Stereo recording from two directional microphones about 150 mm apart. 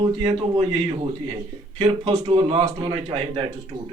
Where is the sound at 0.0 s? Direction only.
30° right (ahead or behind).